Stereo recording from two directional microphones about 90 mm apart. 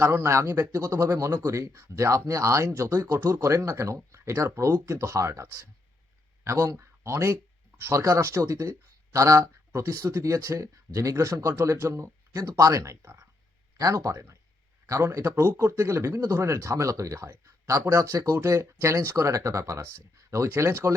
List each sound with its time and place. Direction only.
0.0 s speech: 30° right (ahead or behind)